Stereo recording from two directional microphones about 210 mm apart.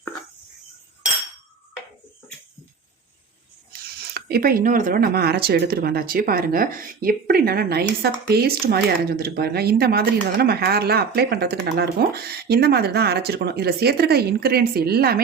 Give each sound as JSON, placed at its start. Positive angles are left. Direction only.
{"t": 3.7, "sound": "speech", "side_deg": -45}